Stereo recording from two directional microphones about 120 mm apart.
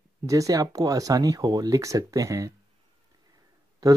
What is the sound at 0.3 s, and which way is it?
Speech, 30° right (ahead or behind).